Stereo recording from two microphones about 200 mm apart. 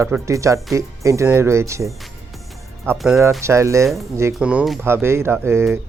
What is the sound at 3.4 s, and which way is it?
Speech, 15° right (ahead or behind).